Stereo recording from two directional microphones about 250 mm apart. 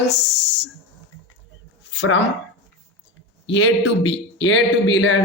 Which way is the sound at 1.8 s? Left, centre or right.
Left.